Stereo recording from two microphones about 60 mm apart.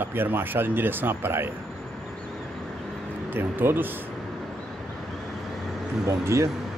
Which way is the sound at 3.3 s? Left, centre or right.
Right.